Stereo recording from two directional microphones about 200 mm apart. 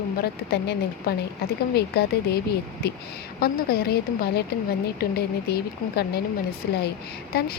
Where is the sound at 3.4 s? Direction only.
50° left (ahead or behind).